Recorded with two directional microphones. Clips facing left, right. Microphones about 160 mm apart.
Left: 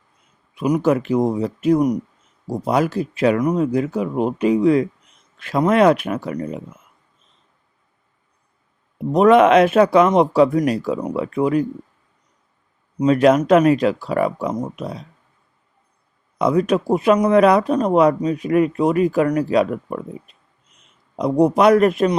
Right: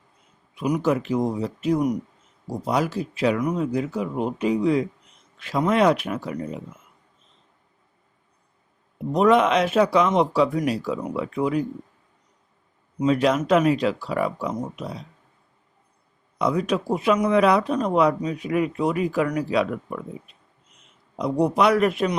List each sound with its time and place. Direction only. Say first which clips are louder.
0.7 s speech: left 5 dB; 55° left (ahead or behind)
9.1 s speech: left 6 dB; 60° left (ahead or behind)
13.0 s speech: left 6 dB; 50° left (ahead or behind)
16.4 s speech: left 6 dB; 50° left (ahead or behind)
21.2 s speech: left 5 dB; 45° left (ahead or behind)